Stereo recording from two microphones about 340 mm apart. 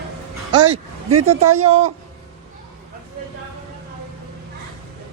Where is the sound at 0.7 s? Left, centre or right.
Right.